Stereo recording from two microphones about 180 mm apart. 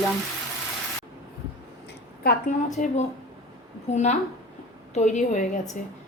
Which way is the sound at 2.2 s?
45° left (ahead or behind).